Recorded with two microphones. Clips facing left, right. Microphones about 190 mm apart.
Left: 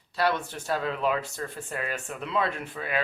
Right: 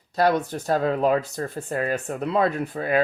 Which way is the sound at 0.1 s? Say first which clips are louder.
Right 6 dB; 40° right (ahead or behind).